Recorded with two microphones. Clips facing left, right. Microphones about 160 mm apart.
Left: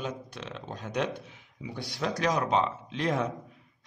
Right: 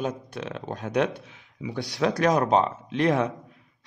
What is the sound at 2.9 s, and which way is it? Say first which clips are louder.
Speech: right 8 dB; 65° right (ahead or behind).